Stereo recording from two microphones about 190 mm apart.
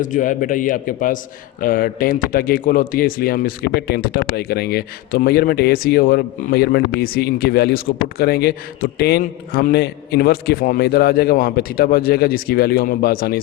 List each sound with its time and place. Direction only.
0.0 s speech: 45° left (ahead or behind)